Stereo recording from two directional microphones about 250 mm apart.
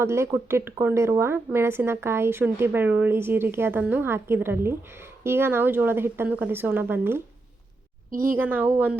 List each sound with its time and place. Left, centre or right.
0.0 s a woman's voice: centre
8.3 s a woman's voice: centre